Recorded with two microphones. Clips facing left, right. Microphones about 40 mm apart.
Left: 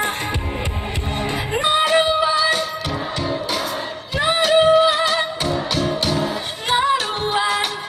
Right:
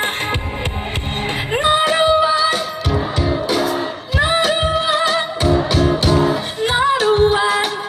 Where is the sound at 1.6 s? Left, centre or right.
Centre.